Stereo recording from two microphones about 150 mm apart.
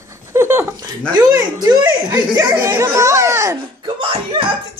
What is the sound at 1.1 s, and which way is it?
Speech, 25° right (ahead or behind).